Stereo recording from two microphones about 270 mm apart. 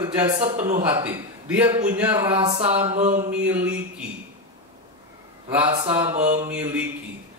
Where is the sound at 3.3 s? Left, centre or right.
Centre.